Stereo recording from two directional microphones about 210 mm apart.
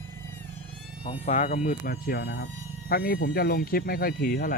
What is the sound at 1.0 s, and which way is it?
Speech, 30° left (ahead or behind).